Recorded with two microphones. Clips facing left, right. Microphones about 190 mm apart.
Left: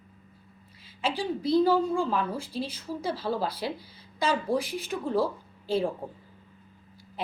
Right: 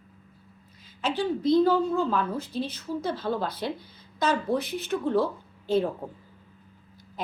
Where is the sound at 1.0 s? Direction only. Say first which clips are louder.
Right 3 dB; 10° left (ahead or behind).